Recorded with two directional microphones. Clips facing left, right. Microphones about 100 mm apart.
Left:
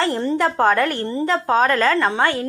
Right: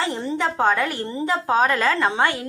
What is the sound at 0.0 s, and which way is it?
Speech, centre (ahead or behind).